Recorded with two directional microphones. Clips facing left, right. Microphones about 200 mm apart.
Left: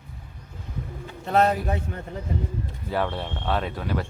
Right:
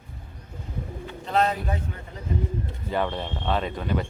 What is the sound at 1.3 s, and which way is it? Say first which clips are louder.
Speech: left 3 dB; 45° left (ahead or behind).